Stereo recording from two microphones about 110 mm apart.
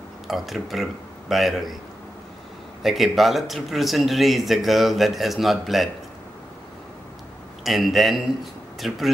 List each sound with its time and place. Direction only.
0.3 s speech: centre (ahead or behind)
2.8 s speech: centre (ahead or behind)
7.6 s speech: centre (ahead or behind)